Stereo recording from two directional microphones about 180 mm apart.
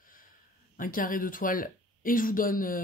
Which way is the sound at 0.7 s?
50° left (ahead or behind).